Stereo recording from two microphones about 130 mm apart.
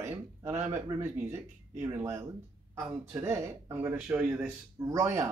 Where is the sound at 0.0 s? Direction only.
20° right (ahead or behind).